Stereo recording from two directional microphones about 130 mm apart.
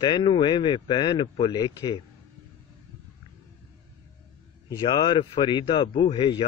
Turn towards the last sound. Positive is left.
turn(degrees=40)  # may be behind; listen again after turning